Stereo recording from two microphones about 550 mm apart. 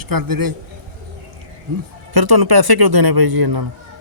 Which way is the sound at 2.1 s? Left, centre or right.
Right.